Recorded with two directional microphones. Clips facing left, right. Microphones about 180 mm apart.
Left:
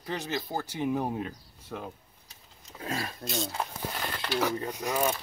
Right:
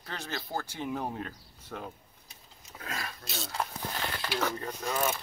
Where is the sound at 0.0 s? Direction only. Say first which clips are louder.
Left 6 dB; 15° left (ahead or behind).